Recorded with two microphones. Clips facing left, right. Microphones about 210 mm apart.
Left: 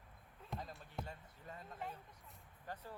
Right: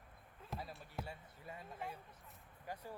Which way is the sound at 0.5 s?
5° right (ahead or behind).